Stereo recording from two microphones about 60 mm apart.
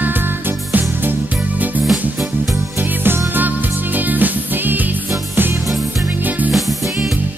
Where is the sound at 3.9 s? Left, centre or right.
Right.